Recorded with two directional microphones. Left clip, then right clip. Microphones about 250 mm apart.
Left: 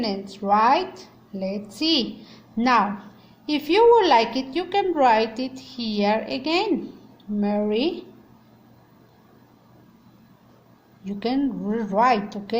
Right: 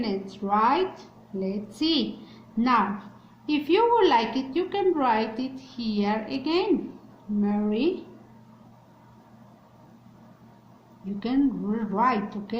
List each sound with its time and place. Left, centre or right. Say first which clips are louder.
0.0 s a woman's voice: left 3 dB; left
11.2 s a woman's voice: left 1 dB; left